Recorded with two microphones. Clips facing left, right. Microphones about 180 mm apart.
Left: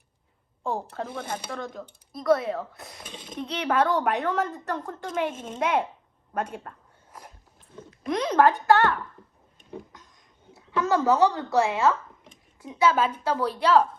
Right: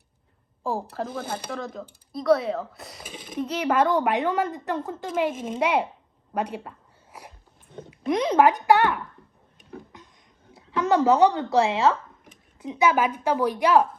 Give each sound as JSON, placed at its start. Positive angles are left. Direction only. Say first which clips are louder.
{"t": 0.6, "sound": "speech", "louder": "right 2 dB", "side_deg": -5}
{"t": 6.3, "sound": "a sound", "louder": "right 2 dB", "side_deg": -10}
{"t": 7.9, "sound": "speech", "louder": "right 3 dB", "side_deg": -15}
{"t": 10.5, "sound": "speech", "louder": "right 2 dB", "side_deg": -15}